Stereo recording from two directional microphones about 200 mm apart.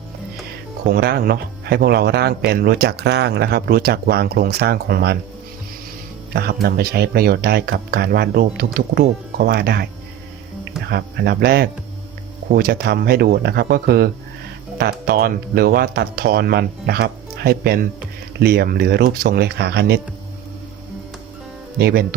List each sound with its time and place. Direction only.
0.9 s speech: 50° right (ahead or behind)
6.3 s speech: 50° right (ahead or behind)
10.8 s speech: 55° right (ahead or behind)
21.8 s speech: 55° right (ahead or behind)